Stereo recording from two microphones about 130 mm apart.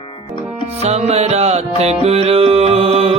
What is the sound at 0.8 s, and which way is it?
Speech, 55° right (ahead or behind).